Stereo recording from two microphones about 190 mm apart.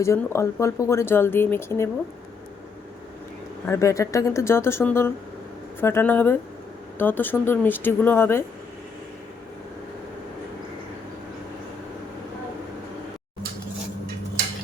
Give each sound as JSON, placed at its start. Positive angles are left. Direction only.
{"t": 0.0, "sound": "speech", "side_deg": 15}
{"t": 3.7, "sound": "speech", "side_deg": 15}